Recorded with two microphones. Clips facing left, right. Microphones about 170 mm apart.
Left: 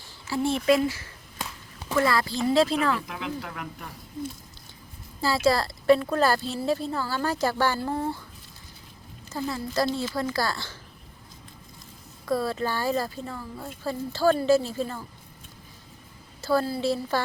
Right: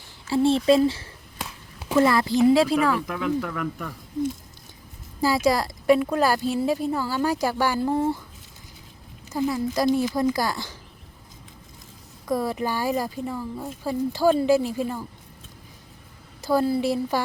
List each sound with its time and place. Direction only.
0.3 s speech: 30° right (ahead or behind)
1.4 s a sound: 5° right (ahead or behind)
2.0 s a woman's voice: 20° right (ahead or behind)
5.2 s a woman's voice: 15° right (ahead or behind)
9.3 s a woman's voice: 15° right (ahead or behind)
12.2 s a woman's voice: 15° right (ahead or behind)
16.4 s a woman's voice: 15° right (ahead or behind)